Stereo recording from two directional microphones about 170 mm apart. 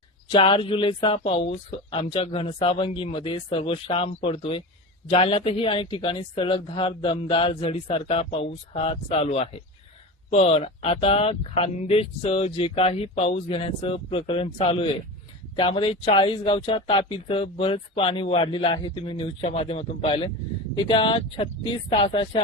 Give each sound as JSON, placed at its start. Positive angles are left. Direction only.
{"t": 0.3, "sound": "speech", "side_deg": 30}